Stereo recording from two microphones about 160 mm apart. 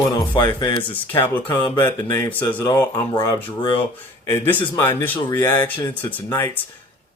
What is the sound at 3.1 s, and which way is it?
Speech, 30° left (ahead or behind).